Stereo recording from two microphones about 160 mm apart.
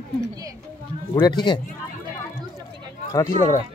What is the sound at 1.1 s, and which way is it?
Speech, 25° left (ahead or behind).